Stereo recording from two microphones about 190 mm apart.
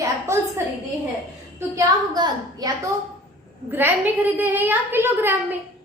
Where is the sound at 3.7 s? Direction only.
10° right (ahead or behind).